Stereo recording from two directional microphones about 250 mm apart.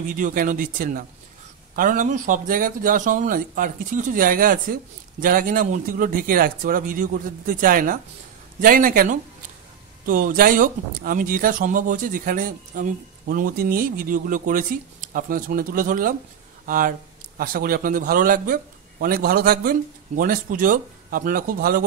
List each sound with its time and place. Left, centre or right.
0.1 s speech: right